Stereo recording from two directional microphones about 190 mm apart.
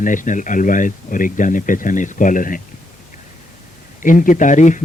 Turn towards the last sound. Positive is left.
turn(degrees=40)  # may be behind; listen again after turning